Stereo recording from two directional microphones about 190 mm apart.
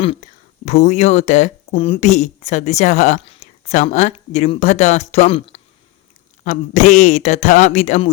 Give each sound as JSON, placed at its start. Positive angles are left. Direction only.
{"t": 0.0, "sound": "speech", "side_deg": 35}